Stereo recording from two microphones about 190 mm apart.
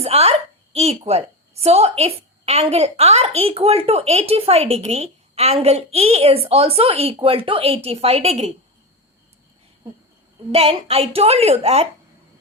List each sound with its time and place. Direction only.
0.0 s a woman's voice: 35° right (ahead or behind)
10.5 s a woman's voice: 30° right (ahead or behind)